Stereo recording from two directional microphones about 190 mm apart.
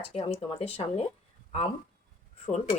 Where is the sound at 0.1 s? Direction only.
35° left (ahead or behind).